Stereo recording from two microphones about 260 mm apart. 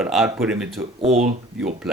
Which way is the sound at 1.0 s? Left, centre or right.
Right.